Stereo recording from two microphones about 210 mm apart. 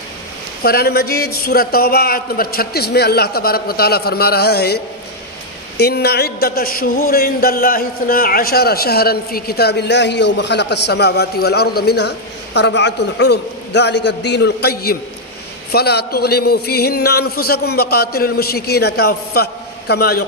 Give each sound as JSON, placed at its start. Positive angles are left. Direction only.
{"t": 0.6, "sound": "a man's voice", "side_deg": 50}